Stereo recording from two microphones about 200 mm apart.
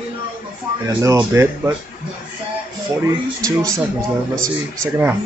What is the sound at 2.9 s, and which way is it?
Speech, 15° right (ahead or behind).